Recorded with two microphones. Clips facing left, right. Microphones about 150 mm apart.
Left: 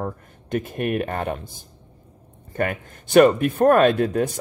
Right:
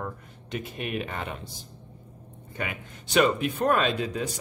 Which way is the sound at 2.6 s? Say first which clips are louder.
Left 10 dB; 50° left (ahead or behind).